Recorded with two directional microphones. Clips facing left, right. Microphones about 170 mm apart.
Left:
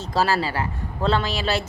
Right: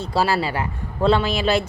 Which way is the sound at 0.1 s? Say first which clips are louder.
Right 1 dB; 10° right (ahead or behind).